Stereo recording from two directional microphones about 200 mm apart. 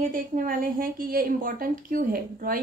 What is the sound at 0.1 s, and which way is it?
A woman's voice, 45° right (ahead or behind).